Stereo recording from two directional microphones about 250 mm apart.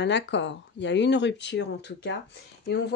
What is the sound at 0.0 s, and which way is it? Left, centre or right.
Speech, left.